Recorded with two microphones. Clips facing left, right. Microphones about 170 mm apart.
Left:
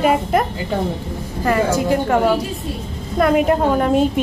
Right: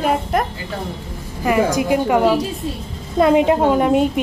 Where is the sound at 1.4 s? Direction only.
15° right (ahead or behind).